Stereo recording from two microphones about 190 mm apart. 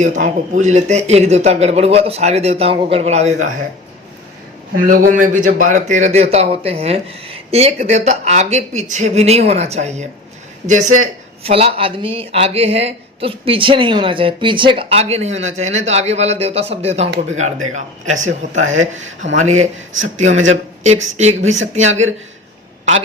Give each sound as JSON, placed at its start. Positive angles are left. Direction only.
{"t": 0.0, "sound": "speech", "side_deg": -40}
{"t": 4.8, "sound": "speech", "side_deg": -45}